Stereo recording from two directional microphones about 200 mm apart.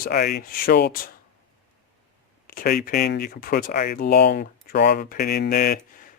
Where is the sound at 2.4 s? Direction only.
45° left (ahead or behind).